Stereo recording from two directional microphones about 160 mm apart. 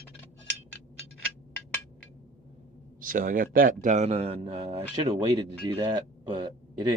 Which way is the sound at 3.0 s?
60° right (ahead or behind).